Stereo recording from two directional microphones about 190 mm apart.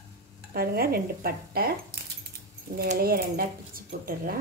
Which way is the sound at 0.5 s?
55° right (ahead or behind).